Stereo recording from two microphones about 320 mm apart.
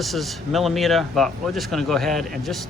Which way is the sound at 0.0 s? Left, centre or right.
Centre.